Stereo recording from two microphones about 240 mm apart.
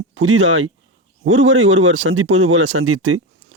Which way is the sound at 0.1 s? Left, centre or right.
Right.